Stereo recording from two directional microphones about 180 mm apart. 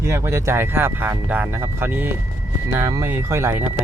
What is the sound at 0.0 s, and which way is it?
Speech, 15° right (ahead or behind).